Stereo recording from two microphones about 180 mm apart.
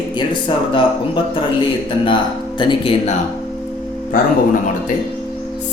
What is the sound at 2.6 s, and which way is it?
Speech, 30° left (ahead or behind).